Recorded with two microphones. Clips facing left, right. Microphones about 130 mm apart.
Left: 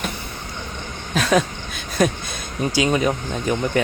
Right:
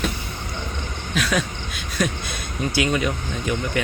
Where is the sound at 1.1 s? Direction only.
40° left (ahead or behind).